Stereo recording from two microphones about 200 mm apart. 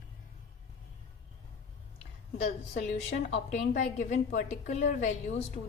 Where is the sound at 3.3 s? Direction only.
35° left (ahead or behind).